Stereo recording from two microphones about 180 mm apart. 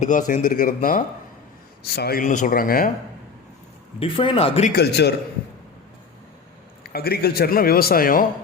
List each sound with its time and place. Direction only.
0.0 s speech: 45° left (ahead or behind)
4.0 s speech: 30° left (ahead or behind)
4.7 s a man's voice: 65° left (ahead or behind)
6.8 s a man's voice: 60° left (ahead or behind)